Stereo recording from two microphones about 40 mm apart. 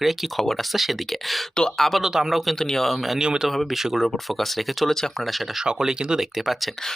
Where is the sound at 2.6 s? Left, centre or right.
Centre.